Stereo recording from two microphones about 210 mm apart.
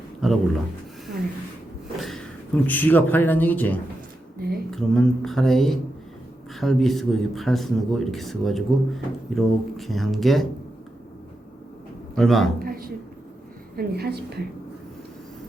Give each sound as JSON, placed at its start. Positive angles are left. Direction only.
{"t": 0.2, "sound": "speech", "side_deg": 0}
{"t": 2.0, "sound": "a sound", "side_deg": 0}
{"t": 2.6, "sound": "speech", "side_deg": 10}
{"t": 4.4, "sound": "a sound", "side_deg": -50}
{"t": 4.7, "sound": "a man's voice", "side_deg": 0}
{"t": 12.1, "sound": "a man's voice", "side_deg": 0}
{"t": 12.5, "sound": "a woman's voice", "side_deg": -45}